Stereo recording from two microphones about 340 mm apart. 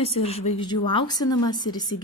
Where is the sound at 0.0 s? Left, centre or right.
Centre.